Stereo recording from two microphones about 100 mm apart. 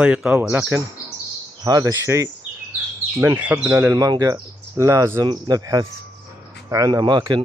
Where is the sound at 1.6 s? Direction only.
35° right (ahead or behind).